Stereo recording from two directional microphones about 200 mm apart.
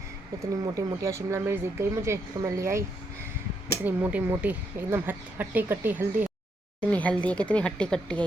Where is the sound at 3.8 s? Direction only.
10° right (ahead or behind).